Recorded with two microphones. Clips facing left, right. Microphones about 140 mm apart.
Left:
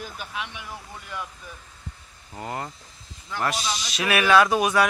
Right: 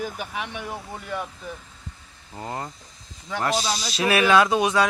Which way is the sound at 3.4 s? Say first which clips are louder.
Right 2 dB; 30° right (ahead or behind).